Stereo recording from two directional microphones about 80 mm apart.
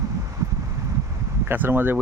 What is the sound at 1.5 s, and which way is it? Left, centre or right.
Speech, right.